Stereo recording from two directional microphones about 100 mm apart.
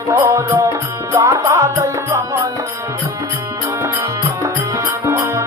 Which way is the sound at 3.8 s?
30° right (ahead or behind).